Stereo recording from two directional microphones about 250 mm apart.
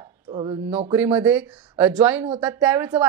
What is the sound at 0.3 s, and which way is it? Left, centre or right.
Speech, right.